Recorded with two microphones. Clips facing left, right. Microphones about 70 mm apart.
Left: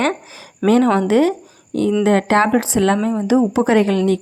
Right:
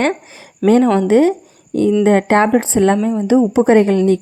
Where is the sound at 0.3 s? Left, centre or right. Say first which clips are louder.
Right 3 dB; right.